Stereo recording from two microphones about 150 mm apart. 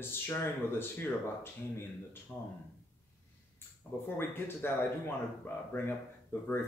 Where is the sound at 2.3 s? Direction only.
5° left (ahead or behind).